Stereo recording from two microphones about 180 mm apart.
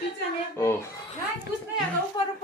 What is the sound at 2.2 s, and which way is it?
Speech, 25° left (ahead or behind).